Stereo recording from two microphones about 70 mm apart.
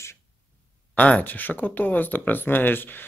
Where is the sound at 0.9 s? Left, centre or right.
Left.